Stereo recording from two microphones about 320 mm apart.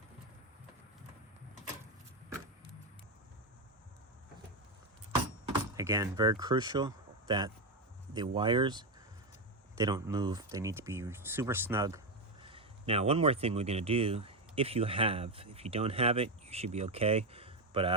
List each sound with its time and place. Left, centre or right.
5.7 s speech: centre